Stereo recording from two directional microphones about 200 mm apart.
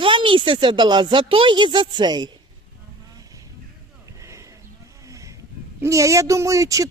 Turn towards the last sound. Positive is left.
turn(degrees=-15)  # may be behind; listen again after turning